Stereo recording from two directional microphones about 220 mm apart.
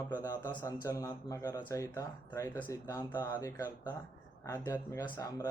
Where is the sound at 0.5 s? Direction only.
15° left (ahead or behind).